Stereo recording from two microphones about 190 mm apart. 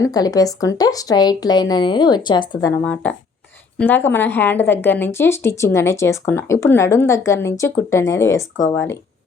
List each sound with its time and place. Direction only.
0.0 s a woman's voice: 20° left (ahead or behind)
2.8 s speech: 5° left (ahead or behind)